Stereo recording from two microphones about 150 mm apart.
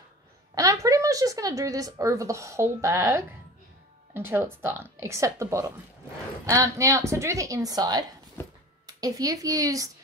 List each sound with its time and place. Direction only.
0.6 s a woman's voice: 20° right (ahead or behind)
8.4 s a sound: 15° left (ahead or behind)
8.8 s a woman's voice: 25° right (ahead or behind)